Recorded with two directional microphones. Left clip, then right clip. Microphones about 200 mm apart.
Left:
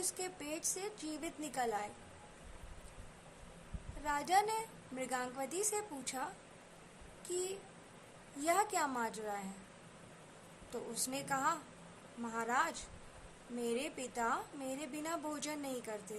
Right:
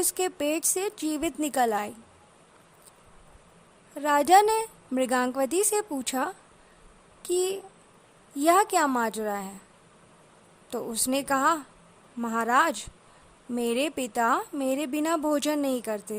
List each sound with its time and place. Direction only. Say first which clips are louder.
0.1 s a woman's voice: right 16 dB; 55° right (ahead or behind)
4.0 s a woman's voice: right 14 dB; 55° right (ahead or behind)
10.7 s a woman's voice: right 13 dB; 55° right (ahead or behind)